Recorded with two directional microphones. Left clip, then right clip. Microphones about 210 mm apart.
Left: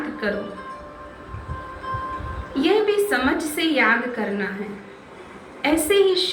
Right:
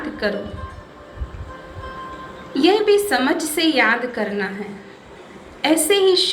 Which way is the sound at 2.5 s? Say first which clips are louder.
Right 4 dB; 55° right (ahead or behind).